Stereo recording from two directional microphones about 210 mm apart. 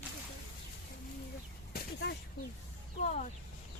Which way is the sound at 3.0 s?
35° left (ahead or behind).